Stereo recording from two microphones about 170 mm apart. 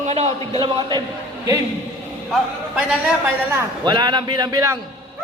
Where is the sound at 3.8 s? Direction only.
25° right (ahead or behind).